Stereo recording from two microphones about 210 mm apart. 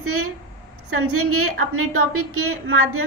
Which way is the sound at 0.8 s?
90° right.